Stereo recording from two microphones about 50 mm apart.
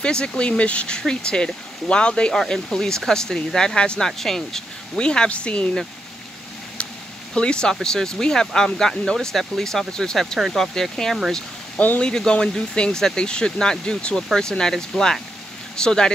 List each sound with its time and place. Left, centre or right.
0.0 s speech: centre
4.2 s speech: centre; by 5.7 s left
7.3 s speech: centre